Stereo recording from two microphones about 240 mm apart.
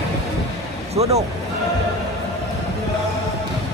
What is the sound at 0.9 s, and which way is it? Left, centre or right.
Vehicle, right.